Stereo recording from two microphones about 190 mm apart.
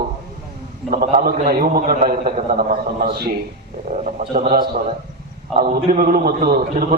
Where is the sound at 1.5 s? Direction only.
50° right (ahead or behind).